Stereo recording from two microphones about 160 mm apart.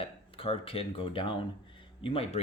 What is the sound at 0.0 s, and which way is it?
Speech, 35° left (ahead or behind).